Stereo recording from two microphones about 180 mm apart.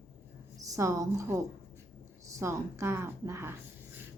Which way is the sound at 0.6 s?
15° right (ahead or behind).